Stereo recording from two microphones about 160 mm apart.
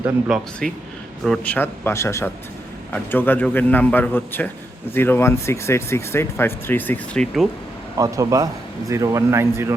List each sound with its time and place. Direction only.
0.3 s speech: centre (ahead or behind)
1.5 s speech: 10° left (ahead or behind)
7.9 s a man's voice: 20° right (ahead or behind)